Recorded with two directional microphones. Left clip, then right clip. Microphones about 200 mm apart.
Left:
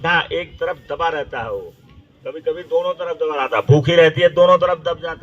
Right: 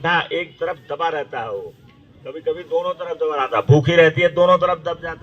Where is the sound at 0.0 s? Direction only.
50° left (ahead or behind).